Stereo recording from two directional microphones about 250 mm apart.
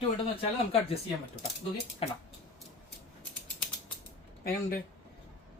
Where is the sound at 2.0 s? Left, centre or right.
Left.